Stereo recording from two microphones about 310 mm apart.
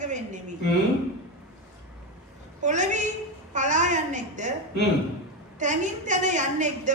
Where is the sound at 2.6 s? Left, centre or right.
Right.